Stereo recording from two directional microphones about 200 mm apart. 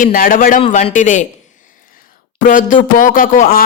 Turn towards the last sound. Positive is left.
turn(degrees=45)  # may be behind; listen again after turning